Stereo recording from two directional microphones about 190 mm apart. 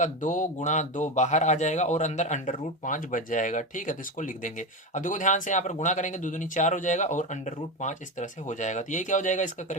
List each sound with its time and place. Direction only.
0.0 s speech: 40° left (ahead or behind)